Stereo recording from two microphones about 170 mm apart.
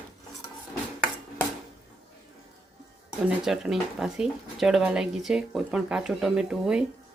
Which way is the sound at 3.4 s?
5° right (ahead or behind).